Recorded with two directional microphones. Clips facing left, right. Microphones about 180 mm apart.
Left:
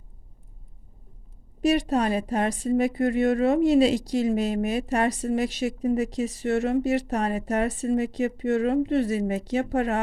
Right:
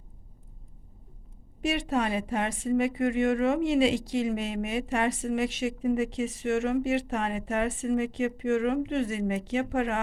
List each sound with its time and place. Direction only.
1.6 s speech: 40° left (ahead or behind)